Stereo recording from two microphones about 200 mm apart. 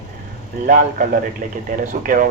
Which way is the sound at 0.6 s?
40° right (ahead or behind).